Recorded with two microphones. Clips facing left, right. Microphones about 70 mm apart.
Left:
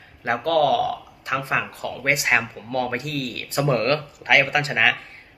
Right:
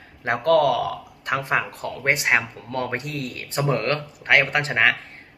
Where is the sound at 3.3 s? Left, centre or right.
Centre.